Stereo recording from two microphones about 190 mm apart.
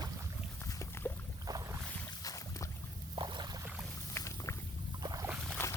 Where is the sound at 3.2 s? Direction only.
25° right (ahead or behind).